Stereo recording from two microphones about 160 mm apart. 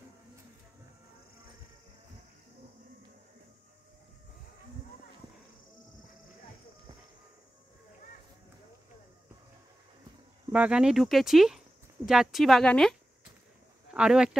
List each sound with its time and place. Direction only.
10.5 s speech: 5° right (ahead or behind)
13.9 s speech: 5° right (ahead or behind)